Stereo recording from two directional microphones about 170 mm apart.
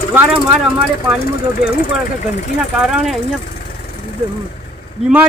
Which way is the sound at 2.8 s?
Centre (ahead or behind).